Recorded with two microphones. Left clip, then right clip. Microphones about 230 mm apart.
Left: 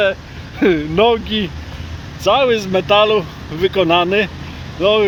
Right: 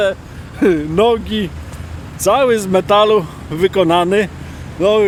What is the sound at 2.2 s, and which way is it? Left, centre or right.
Speech, right.